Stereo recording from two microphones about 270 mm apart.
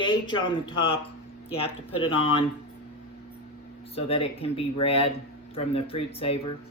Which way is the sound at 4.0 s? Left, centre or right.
Left.